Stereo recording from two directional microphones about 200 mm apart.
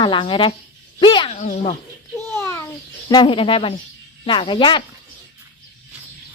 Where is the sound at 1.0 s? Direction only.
25° left (ahead or behind).